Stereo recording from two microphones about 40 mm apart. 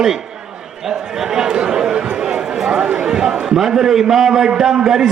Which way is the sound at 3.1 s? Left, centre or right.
Centre.